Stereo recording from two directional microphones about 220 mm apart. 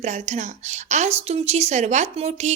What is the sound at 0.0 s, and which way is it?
A woman's voice, 30° right (ahead or behind).